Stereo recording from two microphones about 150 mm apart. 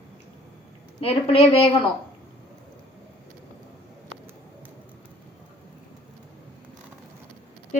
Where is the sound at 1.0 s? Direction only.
40° left (ahead or behind).